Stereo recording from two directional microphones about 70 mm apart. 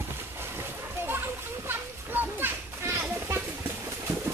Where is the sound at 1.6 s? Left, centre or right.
Right.